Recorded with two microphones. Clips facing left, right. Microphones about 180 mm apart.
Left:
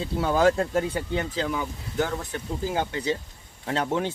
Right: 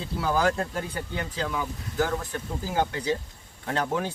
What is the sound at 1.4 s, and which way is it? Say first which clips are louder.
Speech: left 2 dB; 25° left (ahead or behind).